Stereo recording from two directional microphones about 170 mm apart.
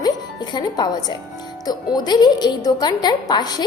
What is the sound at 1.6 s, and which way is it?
A woman's voice, 25° left (ahead or behind).